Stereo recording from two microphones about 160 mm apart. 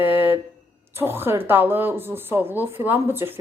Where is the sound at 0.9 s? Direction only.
15° right (ahead or behind).